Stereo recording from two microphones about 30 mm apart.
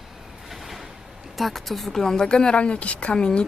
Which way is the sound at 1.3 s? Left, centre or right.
Centre.